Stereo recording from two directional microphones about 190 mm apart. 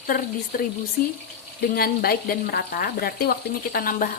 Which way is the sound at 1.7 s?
50° left (ahead or behind).